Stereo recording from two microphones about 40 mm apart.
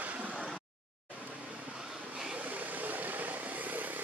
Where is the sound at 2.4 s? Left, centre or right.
Right.